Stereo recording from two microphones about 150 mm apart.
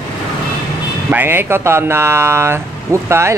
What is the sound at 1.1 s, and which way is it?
Speech, 15° right (ahead or behind).